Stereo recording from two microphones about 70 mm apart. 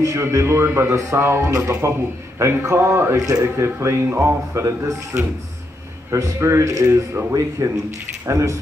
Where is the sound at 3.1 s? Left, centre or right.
Right.